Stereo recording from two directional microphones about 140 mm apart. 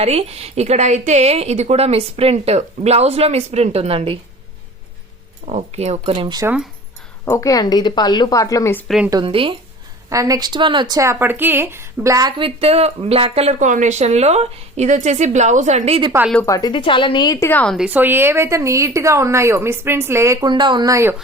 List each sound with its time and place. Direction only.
0.0 s a woman's voice: 45° right (ahead or behind)
5.5 s a woman's voice: 50° right (ahead or behind)
7.3 s speech: 20° left (ahead or behind)
9.2 s speech: 40° right (ahead or behind)
10.1 s a woman's voice: 25° right (ahead or behind)
12.4 s a woman's voice: 45° right (ahead or behind)
16.5 s a woman's voice: 30° left (ahead or behind)
17.4 s a woman's voice: 10° left (ahead or behind)
17.7 s a woman's voice: 10° right (ahead or behind)